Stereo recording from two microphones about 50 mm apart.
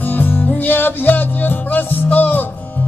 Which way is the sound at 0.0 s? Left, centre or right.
Left.